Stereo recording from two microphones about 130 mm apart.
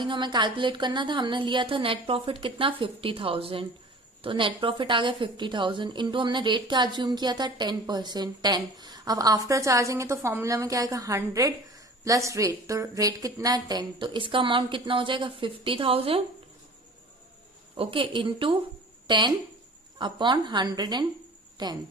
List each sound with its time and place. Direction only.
0.0 s a woman's voice: 35° right (ahead or behind)
17.7 s a woman's voice: 40° right (ahead or behind)